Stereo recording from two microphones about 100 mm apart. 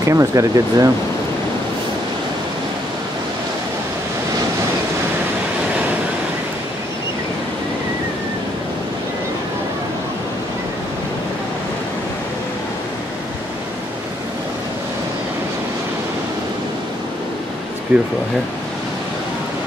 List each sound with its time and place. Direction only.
0.0 s speech: 30° right (ahead or behind)
17.9 s speech: 15° right (ahead or behind)